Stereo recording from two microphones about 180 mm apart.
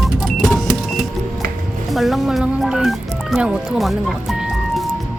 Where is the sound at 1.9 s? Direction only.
Centre (ahead or behind).